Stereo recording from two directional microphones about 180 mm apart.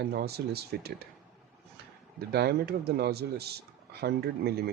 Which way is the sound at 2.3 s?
60° right (ahead or behind).